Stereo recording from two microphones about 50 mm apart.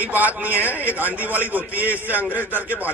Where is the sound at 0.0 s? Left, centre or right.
Right.